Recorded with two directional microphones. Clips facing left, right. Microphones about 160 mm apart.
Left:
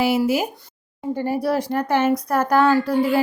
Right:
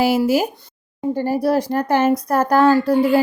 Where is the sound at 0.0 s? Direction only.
35° right (ahead or behind).